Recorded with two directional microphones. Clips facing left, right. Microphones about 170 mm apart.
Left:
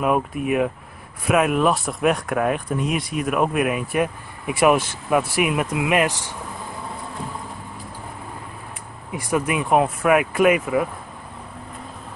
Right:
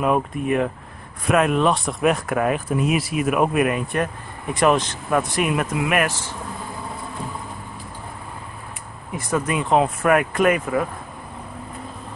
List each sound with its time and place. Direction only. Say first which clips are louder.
0.0 s speech: even; 5° left (ahead or behind)
9.1 s speech: left 1 dB; 15° left (ahead or behind)